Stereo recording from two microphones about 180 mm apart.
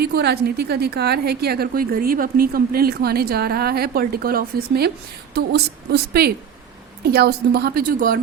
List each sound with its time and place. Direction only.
0.0 s a woman's voice: 65° right (ahead or behind)